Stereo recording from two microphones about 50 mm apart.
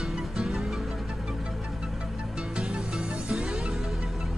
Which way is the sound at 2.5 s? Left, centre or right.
Centre.